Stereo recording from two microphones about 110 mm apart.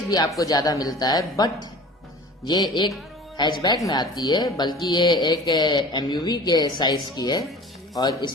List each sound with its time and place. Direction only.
0.3 s speech: 35° left (ahead or behind)
2.5 s speech: 40° left (ahead or behind)